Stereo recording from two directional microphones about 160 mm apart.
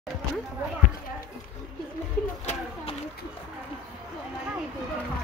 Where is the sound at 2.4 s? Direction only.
35° left (ahead or behind).